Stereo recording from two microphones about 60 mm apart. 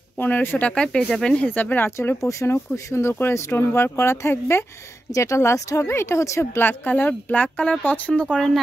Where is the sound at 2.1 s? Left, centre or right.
Left.